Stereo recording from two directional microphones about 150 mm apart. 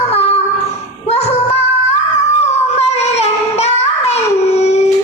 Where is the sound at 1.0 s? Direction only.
45° left (ahead or behind).